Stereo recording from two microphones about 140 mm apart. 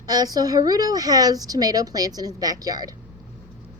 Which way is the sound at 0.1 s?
25° right (ahead or behind).